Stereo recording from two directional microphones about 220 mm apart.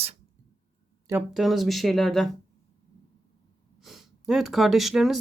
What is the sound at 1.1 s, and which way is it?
Speech, 5° right (ahead or behind).